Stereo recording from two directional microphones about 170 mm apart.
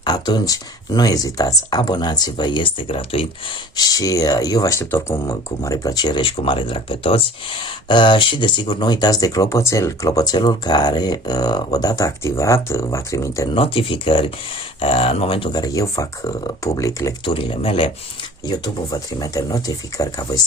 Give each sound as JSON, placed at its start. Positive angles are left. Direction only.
{"t": 0.0, "sound": "speech", "side_deg": 25}
{"t": 3.8, "sound": "speech", "side_deg": 20}
{"t": 13.5, "sound": "speech", "side_deg": 30}
{"t": 17.3, "sound": "speech", "side_deg": 35}
{"t": 18.4, "sound": "speech", "side_deg": 20}